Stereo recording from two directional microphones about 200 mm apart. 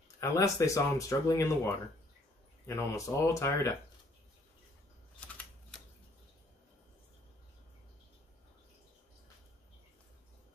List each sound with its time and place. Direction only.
0.2 s speech: 15° left (ahead or behind)